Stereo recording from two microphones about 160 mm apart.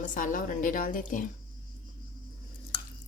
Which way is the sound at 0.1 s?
55° left (ahead or behind).